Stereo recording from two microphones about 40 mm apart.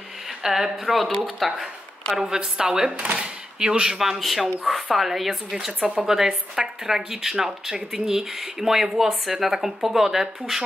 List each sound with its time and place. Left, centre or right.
0.5 s speech: centre
2.1 s speech: centre